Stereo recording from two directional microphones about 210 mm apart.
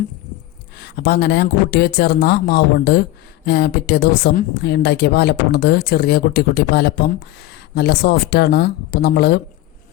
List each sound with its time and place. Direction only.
0.8 s a woman's voice: 50° left (ahead or behind)